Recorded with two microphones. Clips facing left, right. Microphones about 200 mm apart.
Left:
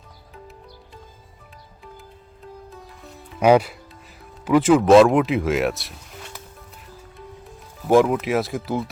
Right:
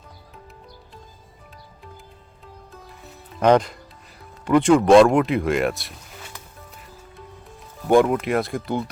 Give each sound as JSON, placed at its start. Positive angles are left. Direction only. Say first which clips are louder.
{"t": 3.4, "sound": "speech", "louder": "left 1 dB", "side_deg": 10}
{"t": 7.9, "sound": "speech", "louder": "even", "side_deg": 0}